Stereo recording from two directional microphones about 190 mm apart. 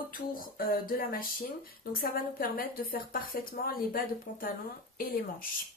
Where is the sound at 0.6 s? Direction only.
50° left (ahead or behind).